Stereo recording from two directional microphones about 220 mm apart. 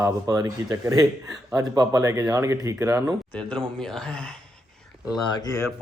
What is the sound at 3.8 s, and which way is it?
Speech, 5° left (ahead or behind).